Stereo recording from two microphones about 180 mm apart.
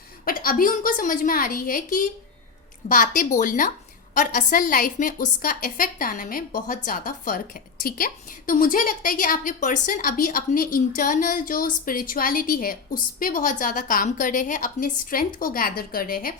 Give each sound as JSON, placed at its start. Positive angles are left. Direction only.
{"t": 0.3, "sound": "a woman's voice", "side_deg": 50}